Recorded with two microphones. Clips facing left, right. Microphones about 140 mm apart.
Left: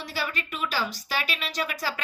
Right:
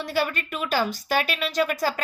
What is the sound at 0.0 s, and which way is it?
A woman's voice, 50° right (ahead or behind).